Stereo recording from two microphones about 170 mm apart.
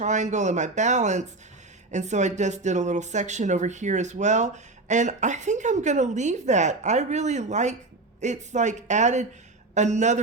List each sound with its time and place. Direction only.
0.0 s speech: 45° right (ahead or behind)